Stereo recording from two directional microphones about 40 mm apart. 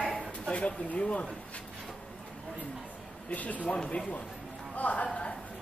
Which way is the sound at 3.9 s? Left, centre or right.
Left.